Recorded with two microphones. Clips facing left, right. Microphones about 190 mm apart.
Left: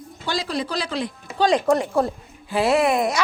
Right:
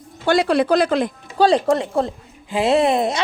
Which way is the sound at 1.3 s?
35° right (ahead or behind).